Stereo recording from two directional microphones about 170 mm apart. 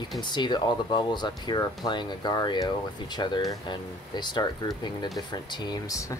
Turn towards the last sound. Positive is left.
turn(degrees=20)  # may be behind; listen again after turning